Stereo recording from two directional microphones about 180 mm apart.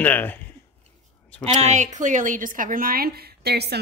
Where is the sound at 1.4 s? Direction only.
40° right (ahead or behind).